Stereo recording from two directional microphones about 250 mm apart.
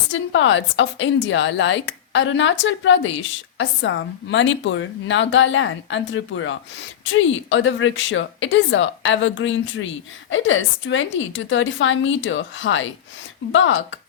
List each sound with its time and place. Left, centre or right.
0.1 s a woman's voice: left